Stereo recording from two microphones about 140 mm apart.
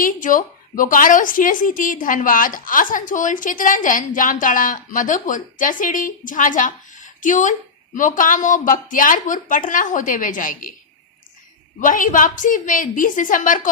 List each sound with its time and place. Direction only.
0.0 s a woman's voice: 70° left (ahead or behind)
11.8 s a woman's voice: 70° left (ahead or behind)